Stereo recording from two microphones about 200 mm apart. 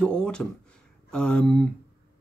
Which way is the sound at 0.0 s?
5° left (ahead or behind).